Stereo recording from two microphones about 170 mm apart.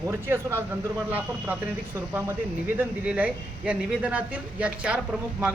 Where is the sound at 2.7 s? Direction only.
5° right (ahead or behind).